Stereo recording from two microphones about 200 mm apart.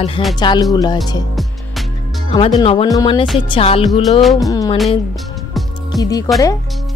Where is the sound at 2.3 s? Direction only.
30° left (ahead or behind).